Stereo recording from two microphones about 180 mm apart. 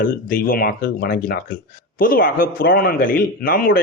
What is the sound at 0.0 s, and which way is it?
Speech, 50° left (ahead or behind).